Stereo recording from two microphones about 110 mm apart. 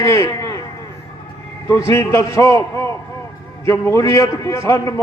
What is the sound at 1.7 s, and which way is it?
A man's voice, 30° left (ahead or behind).